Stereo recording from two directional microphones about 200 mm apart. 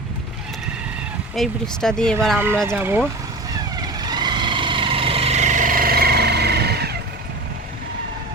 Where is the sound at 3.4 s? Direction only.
20° right (ahead or behind); by 6.9 s 55° right (ahead or behind).